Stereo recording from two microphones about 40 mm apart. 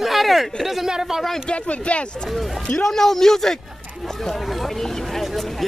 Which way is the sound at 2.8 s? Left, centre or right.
Centre.